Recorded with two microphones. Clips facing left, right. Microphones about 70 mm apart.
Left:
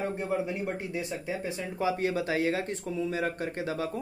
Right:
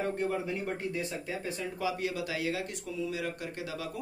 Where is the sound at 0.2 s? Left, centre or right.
Centre.